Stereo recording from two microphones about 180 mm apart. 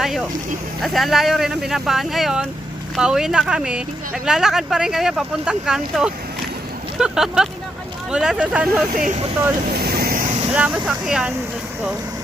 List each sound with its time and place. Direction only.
0.0 s speech: centre (ahead or behind)
9.0 s speech: 45° right (ahead or behind)
9.7 s vehicle: 60° right (ahead or behind)
10.5 s speech: 5° right (ahead or behind)